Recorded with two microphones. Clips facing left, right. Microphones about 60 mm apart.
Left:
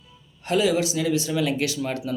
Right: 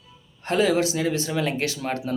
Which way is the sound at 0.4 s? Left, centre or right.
Right.